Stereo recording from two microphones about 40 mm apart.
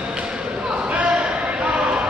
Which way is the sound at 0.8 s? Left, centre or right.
Right.